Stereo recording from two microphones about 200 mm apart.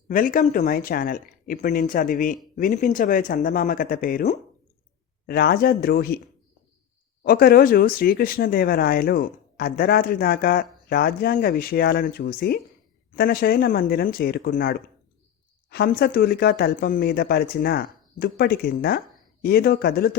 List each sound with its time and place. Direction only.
0.1 s speech: 40° left (ahead or behind)
7.3 s speech: 50° left (ahead or behind)